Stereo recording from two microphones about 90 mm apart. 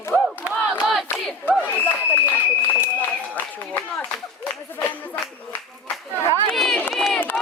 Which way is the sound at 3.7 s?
20° left (ahead or behind).